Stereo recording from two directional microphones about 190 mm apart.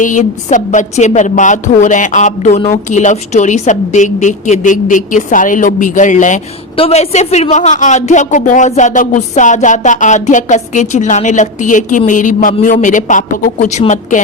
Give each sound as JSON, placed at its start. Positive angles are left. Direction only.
{"t": 0.0, "sound": "a woman's voice", "side_deg": 40}